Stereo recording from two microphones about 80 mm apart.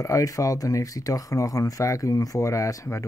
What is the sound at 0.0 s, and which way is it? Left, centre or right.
Speech, left.